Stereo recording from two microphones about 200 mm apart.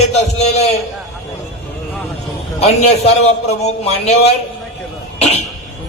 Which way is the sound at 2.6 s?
30° left (ahead or behind).